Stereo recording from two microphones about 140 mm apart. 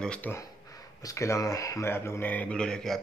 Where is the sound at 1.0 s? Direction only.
20° left (ahead or behind); by 3.0 s 5° left (ahead or behind).